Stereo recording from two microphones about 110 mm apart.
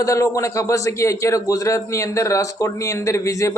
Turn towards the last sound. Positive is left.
turn(degrees=30)  # may be behind; listen again after turning